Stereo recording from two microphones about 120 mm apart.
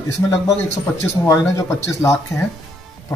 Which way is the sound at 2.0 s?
20° left (ahead or behind).